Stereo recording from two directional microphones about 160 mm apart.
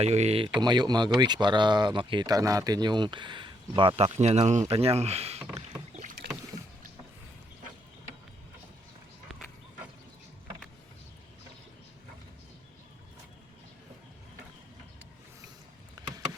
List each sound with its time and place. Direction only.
0.0 s speech: 45° right (ahead or behind)
0.6 s speech: 25° right (ahead or behind)
16.0 s a sound: 25° right (ahead or behind)